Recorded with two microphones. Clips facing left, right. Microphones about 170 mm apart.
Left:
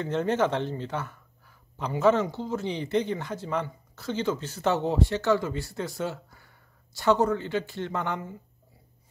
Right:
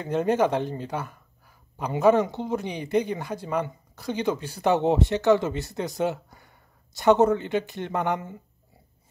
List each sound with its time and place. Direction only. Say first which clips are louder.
0.0 s speech: right 3 dB; 10° right (ahead or behind)